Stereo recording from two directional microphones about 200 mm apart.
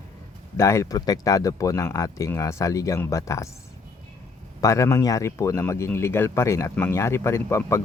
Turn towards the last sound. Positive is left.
turn(degrees=15)  # may be behind; listen again after turning